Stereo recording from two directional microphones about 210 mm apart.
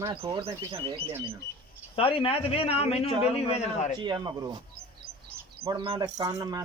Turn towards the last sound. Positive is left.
turn(degrees=-15)  # may be behind; listen again after turning